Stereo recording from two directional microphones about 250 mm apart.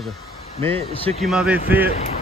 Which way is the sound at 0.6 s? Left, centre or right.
Right.